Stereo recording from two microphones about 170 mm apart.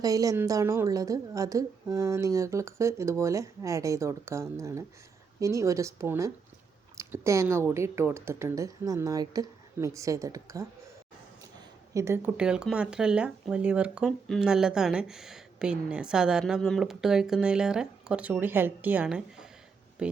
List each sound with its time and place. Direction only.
0.0 s a woman's voice: 20° right (ahead or behind)
11.9 s speech: 15° right (ahead or behind)